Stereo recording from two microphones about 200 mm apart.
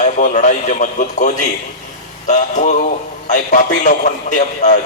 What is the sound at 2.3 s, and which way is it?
A man's voice, 35° left (ahead or behind).